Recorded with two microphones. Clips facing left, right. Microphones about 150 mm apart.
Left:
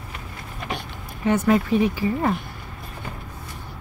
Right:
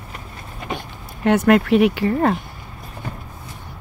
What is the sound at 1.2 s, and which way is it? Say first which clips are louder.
Speech: right 4 dB; 70° right (ahead or behind).